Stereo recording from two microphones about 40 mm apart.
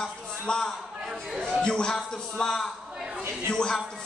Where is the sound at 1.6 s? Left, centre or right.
Centre.